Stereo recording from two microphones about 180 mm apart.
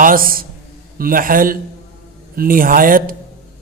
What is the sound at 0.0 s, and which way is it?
Speech, 50° right (ahead or behind).